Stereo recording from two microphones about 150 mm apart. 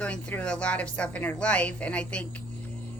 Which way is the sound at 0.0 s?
10° left (ahead or behind).